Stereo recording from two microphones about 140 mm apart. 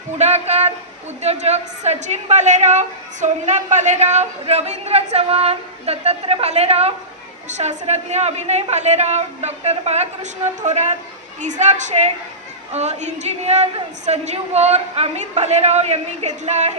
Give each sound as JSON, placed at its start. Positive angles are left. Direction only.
{"t": 0.2, "sound": "a woman's voice", "side_deg": -50}